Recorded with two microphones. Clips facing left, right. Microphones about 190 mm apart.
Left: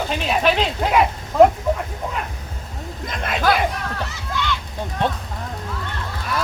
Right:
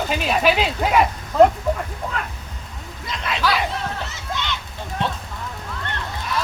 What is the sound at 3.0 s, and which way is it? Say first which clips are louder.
Speech: left 3 dB; 50° left (ahead or behind).